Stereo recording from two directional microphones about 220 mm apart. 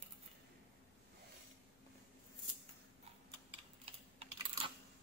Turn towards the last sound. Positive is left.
turn(degrees=-30)  # may be behind; listen again after turning